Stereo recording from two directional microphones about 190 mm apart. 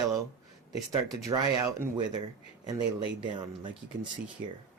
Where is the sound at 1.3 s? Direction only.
15° right (ahead or behind).